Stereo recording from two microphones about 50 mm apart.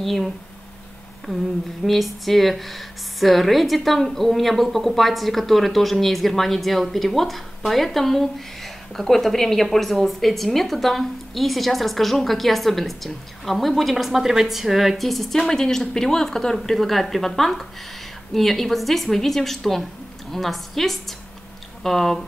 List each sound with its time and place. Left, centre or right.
0.0 s a woman's voice: centre